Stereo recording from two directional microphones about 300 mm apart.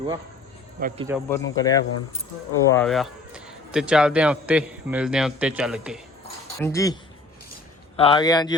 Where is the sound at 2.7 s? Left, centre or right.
Centre.